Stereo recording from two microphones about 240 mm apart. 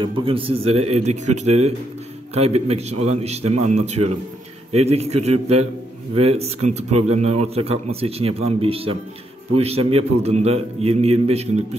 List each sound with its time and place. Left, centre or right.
0.0 s speech: right